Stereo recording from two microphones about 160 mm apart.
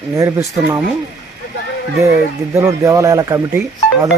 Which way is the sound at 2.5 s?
15° right (ahead or behind).